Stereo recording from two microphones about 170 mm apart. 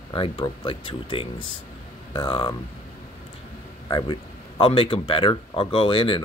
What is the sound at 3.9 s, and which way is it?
Speech, 25° left (ahead or behind).